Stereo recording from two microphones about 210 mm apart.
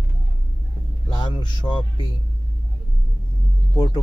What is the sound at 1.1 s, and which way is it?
Speech, 20° left (ahead or behind).